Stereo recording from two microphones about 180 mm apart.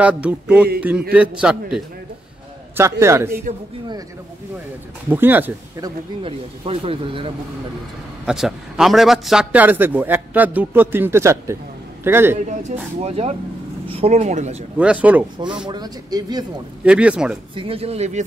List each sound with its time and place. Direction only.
0.0 s a man's voice: 5° right (ahead or behind)
2.8 s a man's voice: 15° right (ahead or behind)
5.1 s a man's voice: 10° right (ahead or behind)
6.2 s speech: 30° right (ahead or behind)
8.3 s a man's voice: 5° right (ahead or behind)
13.0 s speech: 35° right (ahead or behind)
14.8 s a man's voice: 5° right (ahead or behind)
15.7 s speech: 20° right (ahead or behind)
16.8 s a man's voice: 5° right (ahead or behind)
17.6 s speech: 30° right (ahead or behind)